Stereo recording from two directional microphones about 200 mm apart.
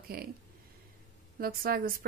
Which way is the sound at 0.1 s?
50° right (ahead or behind).